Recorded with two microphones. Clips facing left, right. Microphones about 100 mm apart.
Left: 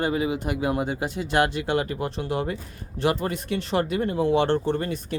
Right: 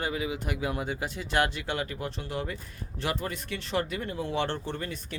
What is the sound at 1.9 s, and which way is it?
Speech, 45° left (ahead or behind).